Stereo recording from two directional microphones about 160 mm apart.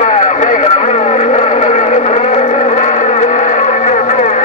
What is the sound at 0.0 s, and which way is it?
Vehicle, 50° left (ahead or behind).